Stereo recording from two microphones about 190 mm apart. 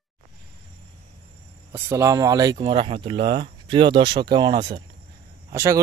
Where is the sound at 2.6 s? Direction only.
30° right (ahead or behind).